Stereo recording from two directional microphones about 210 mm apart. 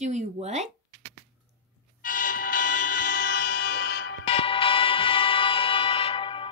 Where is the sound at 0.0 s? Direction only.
35° right (ahead or behind).